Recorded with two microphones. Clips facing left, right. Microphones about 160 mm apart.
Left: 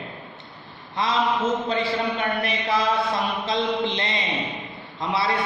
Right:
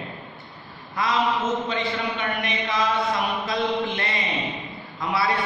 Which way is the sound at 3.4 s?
20° left (ahead or behind).